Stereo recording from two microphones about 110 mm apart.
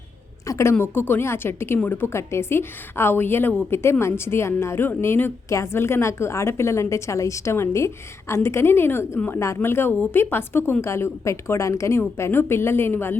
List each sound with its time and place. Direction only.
0.4 s a woman's voice: 25° left (ahead or behind)